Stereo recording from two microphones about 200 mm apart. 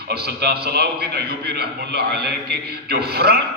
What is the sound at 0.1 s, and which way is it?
A man's voice, 55° right (ahead or behind).